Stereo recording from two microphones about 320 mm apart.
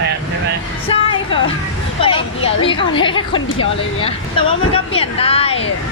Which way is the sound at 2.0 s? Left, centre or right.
Centre.